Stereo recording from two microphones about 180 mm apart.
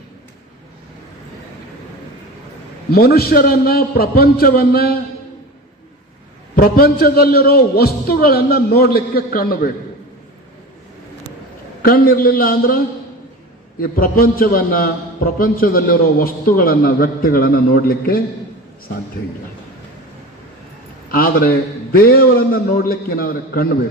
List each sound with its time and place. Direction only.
2.9 s a man's voice: 60° left (ahead or behind)
6.6 s a man's voice: 55° left (ahead or behind)
11.8 s a man's voice: 55° left (ahead or behind)
13.8 s a man's voice: 55° left (ahead or behind)
21.1 s a man's voice: 55° left (ahead or behind)